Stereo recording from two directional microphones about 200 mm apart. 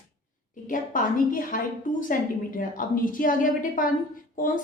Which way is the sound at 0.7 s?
40° left (ahead or behind).